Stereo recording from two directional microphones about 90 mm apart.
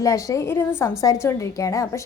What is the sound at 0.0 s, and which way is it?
A woman's voice, 35° left (ahead or behind).